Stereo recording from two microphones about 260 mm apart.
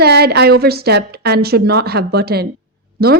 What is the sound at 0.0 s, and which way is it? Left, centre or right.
Speech, right.